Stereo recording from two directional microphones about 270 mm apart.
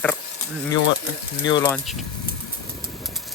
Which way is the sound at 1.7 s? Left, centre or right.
Centre.